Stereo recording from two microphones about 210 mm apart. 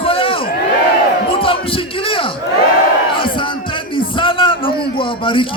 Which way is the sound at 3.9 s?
25° left (ahead or behind).